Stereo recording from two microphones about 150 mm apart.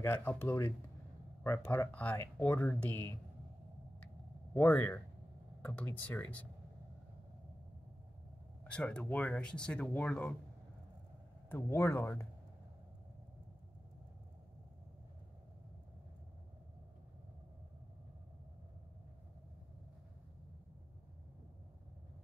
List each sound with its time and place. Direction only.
0.0 s speech: 10° left (ahead or behind)
4.6 s speech: 10° left (ahead or behind)
8.6 s speech: 10° left (ahead or behind)
11.4 s speech: 15° left (ahead or behind)